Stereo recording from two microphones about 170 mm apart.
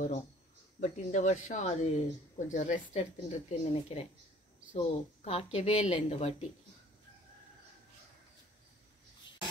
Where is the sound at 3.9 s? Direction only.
35° left (ahead or behind).